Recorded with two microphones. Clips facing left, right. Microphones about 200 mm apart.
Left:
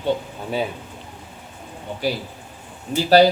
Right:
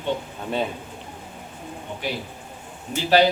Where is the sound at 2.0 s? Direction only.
35° left (ahead or behind).